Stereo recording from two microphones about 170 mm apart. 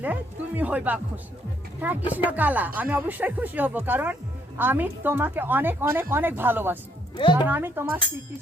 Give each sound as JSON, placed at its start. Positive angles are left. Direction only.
{"t": 0.0, "sound": "speech", "side_deg": -10}